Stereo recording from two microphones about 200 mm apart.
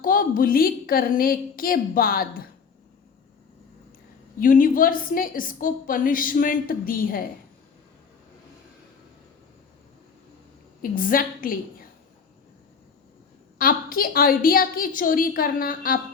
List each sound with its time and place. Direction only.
0.0 s a woman's voice: 45° left (ahead or behind)
4.4 s a woman's voice: 45° left (ahead or behind)
10.9 s a woman's voice: 45° left (ahead or behind)
13.6 s a woman's voice: 45° left (ahead or behind)